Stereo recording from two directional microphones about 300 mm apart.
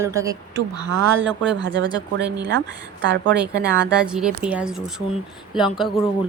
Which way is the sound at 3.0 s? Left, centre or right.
Right.